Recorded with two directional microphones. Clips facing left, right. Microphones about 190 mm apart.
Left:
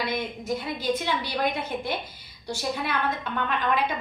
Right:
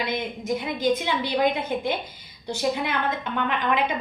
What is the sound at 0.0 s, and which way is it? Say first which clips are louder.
A woman's voice: right 1 dB; 20° right (ahead or behind).